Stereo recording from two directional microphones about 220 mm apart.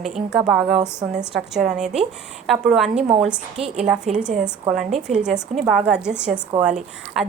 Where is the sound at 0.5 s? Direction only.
20° right (ahead or behind).